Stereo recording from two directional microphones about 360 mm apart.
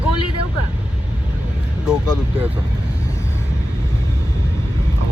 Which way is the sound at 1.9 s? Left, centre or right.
Centre.